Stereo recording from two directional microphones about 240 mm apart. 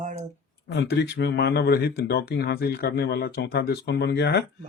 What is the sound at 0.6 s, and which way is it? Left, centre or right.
Speech, left.